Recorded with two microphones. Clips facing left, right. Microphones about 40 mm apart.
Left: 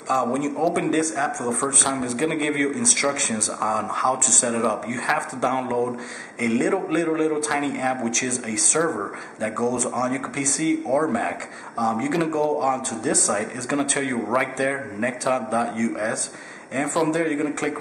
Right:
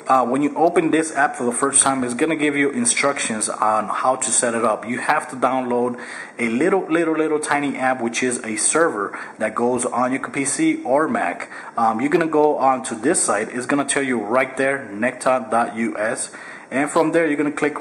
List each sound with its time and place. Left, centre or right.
0.1 s a man's voice: centre